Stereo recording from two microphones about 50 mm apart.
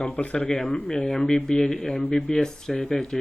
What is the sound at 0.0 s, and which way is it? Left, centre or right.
Speech, left.